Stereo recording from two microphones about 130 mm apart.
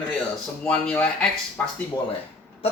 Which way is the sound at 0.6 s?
10° left (ahead or behind).